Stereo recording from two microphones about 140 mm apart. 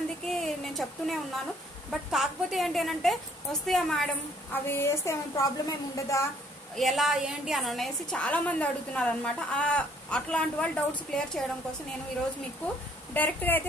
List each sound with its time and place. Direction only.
0.3 s a sound: centre (ahead or behind)
1.9 s a woman's voice: centre (ahead or behind)
4.6 s a woman's voice: 20° left (ahead or behind)
6.8 s a woman's voice: centre (ahead or behind)
13.1 s a woman's voice: 15° left (ahead or behind)